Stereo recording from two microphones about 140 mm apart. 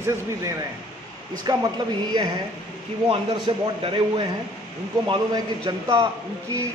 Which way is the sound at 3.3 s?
35° right (ahead or behind).